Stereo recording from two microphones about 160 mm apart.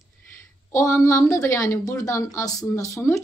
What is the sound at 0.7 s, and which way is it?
A woman's voice, 20° left (ahead or behind).